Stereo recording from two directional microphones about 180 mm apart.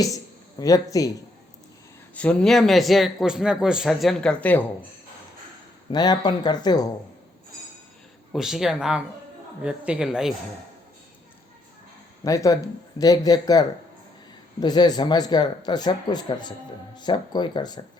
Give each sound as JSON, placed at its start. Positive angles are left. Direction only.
{"t": 0.6, "sound": "speech", "side_deg": 20}
{"t": 2.1, "sound": "a man's voice", "side_deg": 5}
{"t": 5.9, "sound": "speech", "side_deg": 25}
{"t": 8.3, "sound": "a man's voice", "side_deg": 0}
{"t": 12.2, "sound": "speech", "side_deg": 20}